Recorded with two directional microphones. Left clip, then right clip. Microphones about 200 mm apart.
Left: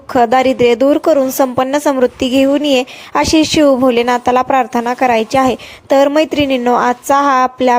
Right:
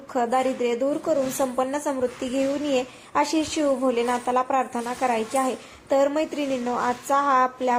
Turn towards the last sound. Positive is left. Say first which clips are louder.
# left 10 dB
turn(degrees=45)  # may be behind; listen again after turning